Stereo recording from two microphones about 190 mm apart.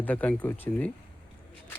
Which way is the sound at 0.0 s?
10° left (ahead or behind).